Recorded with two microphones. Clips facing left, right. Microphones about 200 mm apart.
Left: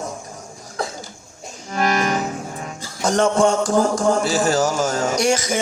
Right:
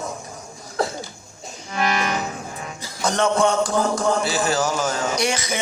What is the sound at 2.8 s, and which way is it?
A man's voice, 45° left (ahead or behind).